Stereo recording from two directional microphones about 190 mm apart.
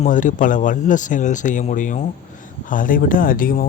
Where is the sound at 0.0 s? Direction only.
40° left (ahead or behind).